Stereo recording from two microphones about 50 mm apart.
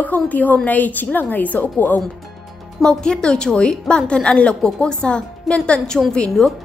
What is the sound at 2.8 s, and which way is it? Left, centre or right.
A woman's voice, centre.